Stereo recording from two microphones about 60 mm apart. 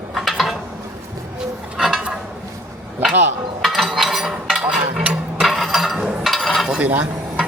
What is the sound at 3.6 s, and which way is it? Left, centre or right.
Chink, centre.